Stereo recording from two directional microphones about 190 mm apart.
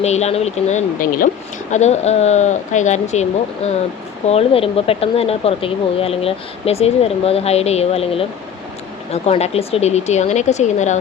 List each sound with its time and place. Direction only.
0.0 s speech: 35° left (ahead or behind)